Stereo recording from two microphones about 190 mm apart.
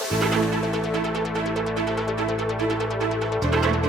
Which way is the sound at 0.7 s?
Centre (ahead or behind).